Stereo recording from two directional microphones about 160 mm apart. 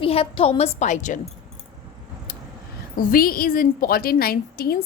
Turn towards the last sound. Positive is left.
turn(degrees=70)  # may be behind; listen again after turning